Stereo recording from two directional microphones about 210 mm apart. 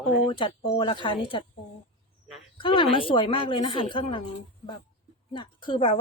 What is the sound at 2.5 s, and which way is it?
Speech, 25° left (ahead or behind).